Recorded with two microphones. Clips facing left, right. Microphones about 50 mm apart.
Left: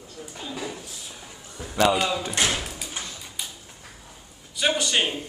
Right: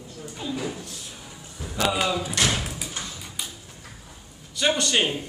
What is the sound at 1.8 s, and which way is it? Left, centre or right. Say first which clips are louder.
Speech: left 3 dB; centre.